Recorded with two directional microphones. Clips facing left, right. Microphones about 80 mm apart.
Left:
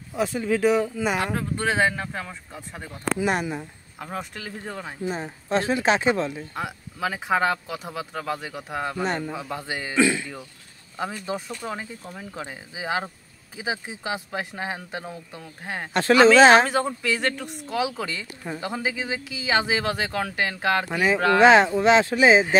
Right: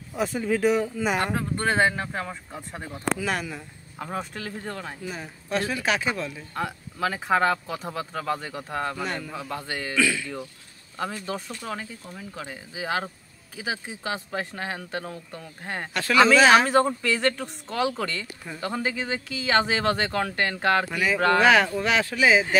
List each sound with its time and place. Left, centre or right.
0.1 s speech: centre
3.2 s speech: left
4.0 s speech: centre
5.0 s speech: left
6.5 s speech: centre
9.0 s speech: left
9.9 s speech: left
11.0 s speech: centre
15.9 s speech: left
16.6 s speech: centre
20.9 s speech: left